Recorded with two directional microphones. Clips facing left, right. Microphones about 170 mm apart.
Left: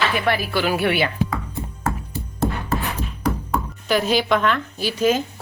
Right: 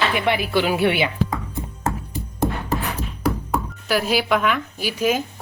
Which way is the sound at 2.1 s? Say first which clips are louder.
Even; 15° right (ahead or behind).